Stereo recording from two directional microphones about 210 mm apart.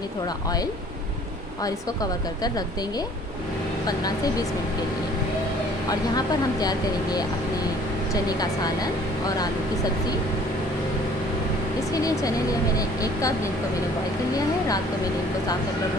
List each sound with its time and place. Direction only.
1.6 s speech: 20° left (ahead or behind)
5.9 s speech: 20° left (ahead or behind)
11.9 s speech: 15° left (ahead or behind)